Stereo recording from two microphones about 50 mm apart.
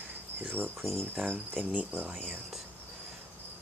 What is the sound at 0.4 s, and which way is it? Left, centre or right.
Cricket, right.